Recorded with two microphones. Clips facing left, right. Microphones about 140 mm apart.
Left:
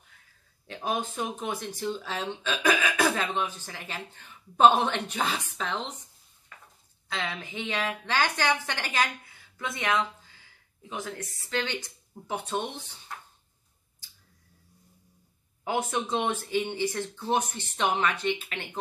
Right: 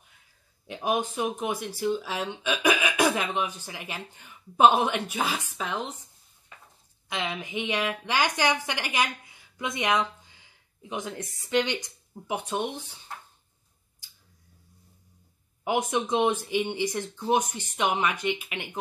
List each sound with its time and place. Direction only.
0.7 s speech: 15° right (ahead or behind)
6.5 s a sound: 20° right (ahead or behind)
7.1 s a woman's voice: 15° right (ahead or behind)
15.6 s speech: 15° right (ahead or behind)